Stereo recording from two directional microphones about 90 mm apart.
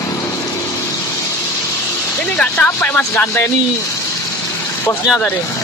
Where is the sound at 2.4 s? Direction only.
20° left (ahead or behind).